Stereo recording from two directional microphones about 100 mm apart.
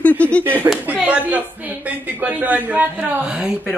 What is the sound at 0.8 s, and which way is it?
A woman's voice, 10° right (ahead or behind).